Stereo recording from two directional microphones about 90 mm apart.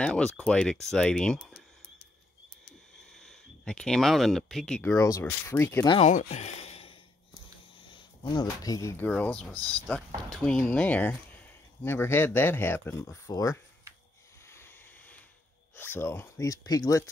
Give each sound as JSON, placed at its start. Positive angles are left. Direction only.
{"t": 0.0, "sound": "speech", "side_deg": 10}
{"t": 3.0, "sound": "speech", "side_deg": 5}
{"t": 4.8, "sound": "speech", "side_deg": 35}
{"t": 5.2, "sound": "speech", "side_deg": 25}
{"t": 7.9, "sound": "speech", "side_deg": 55}
{"t": 8.9, "sound": "speech", "side_deg": 20}
{"t": 9.5, "sound": "speech", "side_deg": -50}
{"t": 9.8, "sound": "speech", "side_deg": 15}
{"t": 13.3, "sound": "speech", "side_deg": 40}
{"t": 15.7, "sound": "speech", "side_deg": 25}